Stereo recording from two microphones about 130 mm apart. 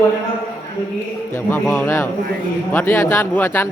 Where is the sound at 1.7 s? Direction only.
20° left (ahead or behind).